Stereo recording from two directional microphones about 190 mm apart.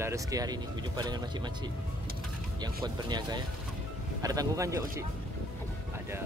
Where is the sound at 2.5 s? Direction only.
20° right (ahead or behind).